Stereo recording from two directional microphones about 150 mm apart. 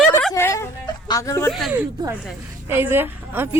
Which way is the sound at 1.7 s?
10° right (ahead or behind).